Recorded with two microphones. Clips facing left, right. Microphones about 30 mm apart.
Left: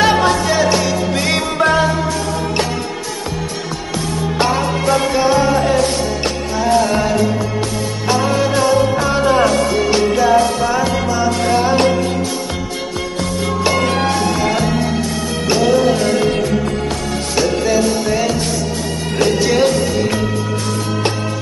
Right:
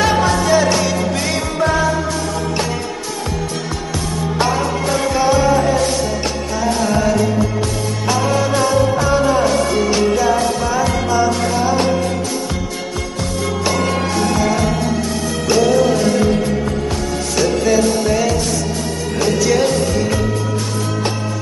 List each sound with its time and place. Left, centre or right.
0.5 s music: centre
1.3 s music: left
4.5 s music: left
5.1 s music: left
8.1 s music: centre
10.2 s speech: centre
11.5 s music: left
15.4 s music: left
17.4 s music: centre
19.4 s speech: left